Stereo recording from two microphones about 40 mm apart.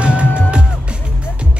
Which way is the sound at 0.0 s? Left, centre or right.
Right.